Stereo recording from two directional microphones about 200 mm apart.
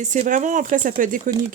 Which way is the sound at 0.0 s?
40° right (ahead or behind).